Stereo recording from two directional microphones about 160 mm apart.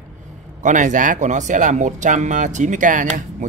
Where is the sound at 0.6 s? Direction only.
50° right (ahead or behind).